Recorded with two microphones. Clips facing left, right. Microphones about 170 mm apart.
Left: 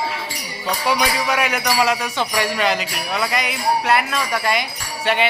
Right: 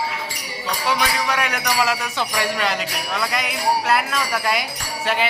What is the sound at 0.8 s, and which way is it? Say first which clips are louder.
Jingle bell: left 2 dB; 10° left (ahead or behind).